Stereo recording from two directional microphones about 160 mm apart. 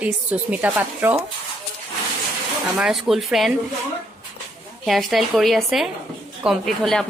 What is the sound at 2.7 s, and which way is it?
Speech, centre (ahead or behind).